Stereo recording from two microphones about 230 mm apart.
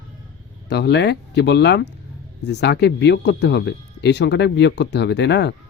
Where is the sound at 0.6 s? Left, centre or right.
Left.